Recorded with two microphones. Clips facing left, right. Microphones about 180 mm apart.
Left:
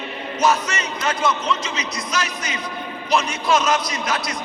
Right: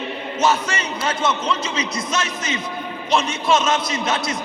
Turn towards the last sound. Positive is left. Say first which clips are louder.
# right 2 dB
turn(degrees=-25)  # may be behind; listen again after turning